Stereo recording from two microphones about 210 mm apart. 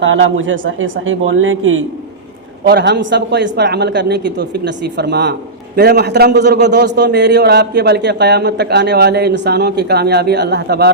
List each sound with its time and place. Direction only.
0.0 s a man's voice: 65° right (ahead or behind)
2.6 s a man's voice: 50° right (ahead or behind)